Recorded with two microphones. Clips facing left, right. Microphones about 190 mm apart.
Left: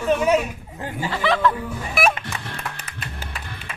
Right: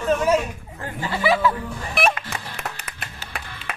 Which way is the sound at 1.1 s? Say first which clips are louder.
Right 1 dB; 5° right (ahead or behind).